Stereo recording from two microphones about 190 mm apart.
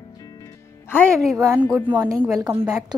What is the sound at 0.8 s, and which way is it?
Speech, 10° left (ahead or behind).